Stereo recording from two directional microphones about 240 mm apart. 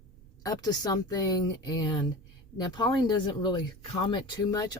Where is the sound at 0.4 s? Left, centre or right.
Centre.